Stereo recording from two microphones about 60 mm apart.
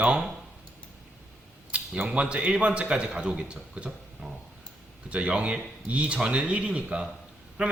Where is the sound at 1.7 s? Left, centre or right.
Right.